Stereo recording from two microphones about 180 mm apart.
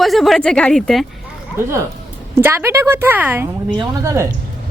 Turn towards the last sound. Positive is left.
turn(degrees=-15)  # may be behind; listen again after turning